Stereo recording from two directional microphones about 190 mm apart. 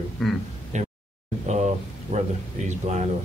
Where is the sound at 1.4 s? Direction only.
35° right (ahead or behind).